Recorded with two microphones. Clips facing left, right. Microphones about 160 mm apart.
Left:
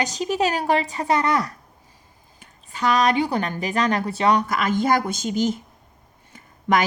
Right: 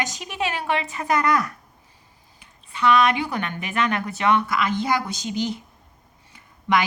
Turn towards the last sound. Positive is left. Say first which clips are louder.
# left 1 dB
turn(degrees=45)  # may be behind; listen again after turning